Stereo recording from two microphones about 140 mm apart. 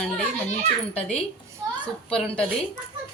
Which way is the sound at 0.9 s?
45° left (ahead or behind).